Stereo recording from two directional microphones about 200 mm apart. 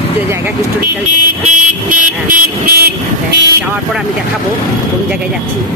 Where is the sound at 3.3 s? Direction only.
60° right (ahead or behind).